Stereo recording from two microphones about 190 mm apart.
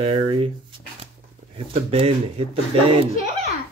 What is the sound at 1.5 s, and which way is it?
Speech, 30° right (ahead or behind).